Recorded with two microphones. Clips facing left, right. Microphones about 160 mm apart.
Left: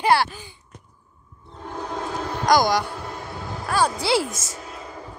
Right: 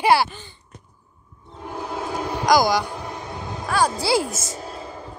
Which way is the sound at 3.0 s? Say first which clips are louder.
Right 1 dB; 20° right (ahead or behind).